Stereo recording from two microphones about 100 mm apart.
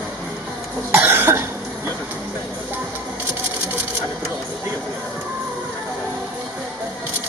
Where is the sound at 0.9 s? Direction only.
20° right (ahead or behind).